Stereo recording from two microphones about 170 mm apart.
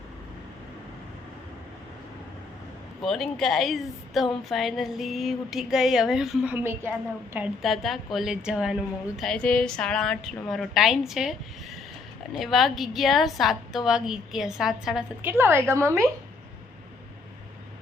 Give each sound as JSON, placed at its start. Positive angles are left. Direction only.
{"t": 3.0, "sound": "a woman's voice", "side_deg": 0}
{"t": 7.3, "sound": "a woman's voice", "side_deg": -5}
{"t": 15.2, "sound": "a woman's voice", "side_deg": -15}